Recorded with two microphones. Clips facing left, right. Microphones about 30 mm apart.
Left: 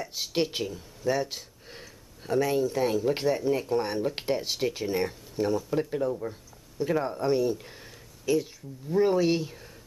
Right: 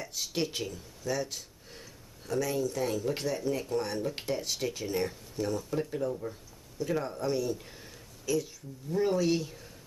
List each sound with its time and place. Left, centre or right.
0.1 s speech: left